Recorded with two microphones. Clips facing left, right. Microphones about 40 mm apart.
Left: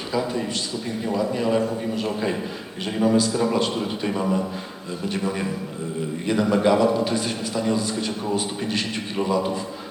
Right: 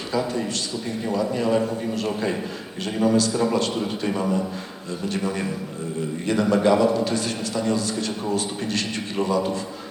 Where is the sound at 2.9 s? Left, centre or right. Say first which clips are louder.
Even; centre.